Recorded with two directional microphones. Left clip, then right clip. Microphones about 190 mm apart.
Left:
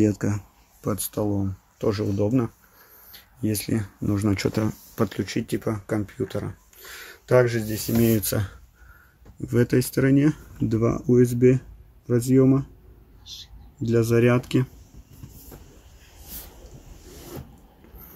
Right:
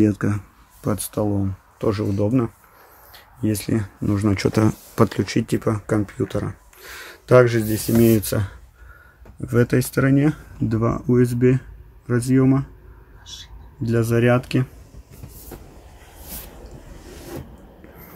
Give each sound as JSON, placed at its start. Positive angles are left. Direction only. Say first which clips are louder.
{"t": 0.0, "sound": "speech", "louder": "right 3 dB", "side_deg": 0}
{"t": 4.6, "sound": "speech", "louder": "right 7 dB", "side_deg": -20}
{"t": 9.5, "sound": "speech", "louder": "right 3 dB", "side_deg": -10}
{"t": 13.8, "sound": "speech", "louder": "right 1 dB", "side_deg": -5}